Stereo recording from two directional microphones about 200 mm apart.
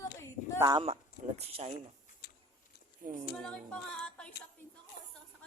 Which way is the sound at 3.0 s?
40° right (ahead or behind).